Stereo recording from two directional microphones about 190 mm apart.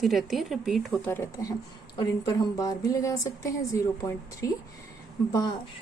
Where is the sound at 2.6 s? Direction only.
20° left (ahead or behind).